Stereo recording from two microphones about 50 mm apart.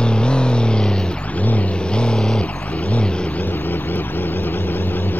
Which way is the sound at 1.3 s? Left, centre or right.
Left.